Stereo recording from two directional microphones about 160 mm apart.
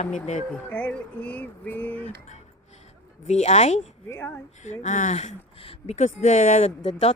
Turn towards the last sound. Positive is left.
turn(degrees=45)  # may be behind; listen again after turning